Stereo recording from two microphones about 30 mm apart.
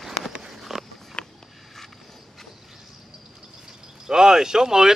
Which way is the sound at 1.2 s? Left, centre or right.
Left.